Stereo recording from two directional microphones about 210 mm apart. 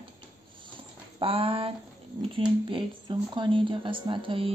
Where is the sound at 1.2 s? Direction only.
25° right (ahead or behind).